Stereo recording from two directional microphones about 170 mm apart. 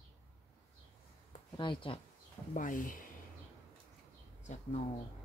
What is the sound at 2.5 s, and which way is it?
Speech, 50° left (ahead or behind).